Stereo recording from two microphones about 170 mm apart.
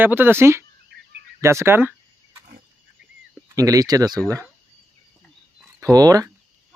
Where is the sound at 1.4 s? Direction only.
15° right (ahead or behind).